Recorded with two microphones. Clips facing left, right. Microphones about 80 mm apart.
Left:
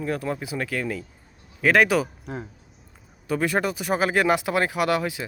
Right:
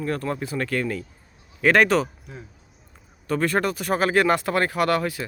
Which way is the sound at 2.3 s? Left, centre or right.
Left.